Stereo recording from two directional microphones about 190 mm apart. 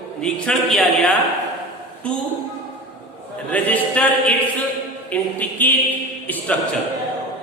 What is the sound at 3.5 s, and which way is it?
Speech, 10° left (ahead or behind).